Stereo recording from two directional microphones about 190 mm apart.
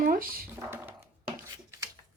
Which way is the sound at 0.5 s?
10° right (ahead or behind).